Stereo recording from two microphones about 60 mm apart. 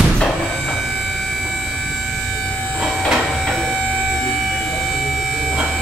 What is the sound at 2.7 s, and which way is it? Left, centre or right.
Train, centre.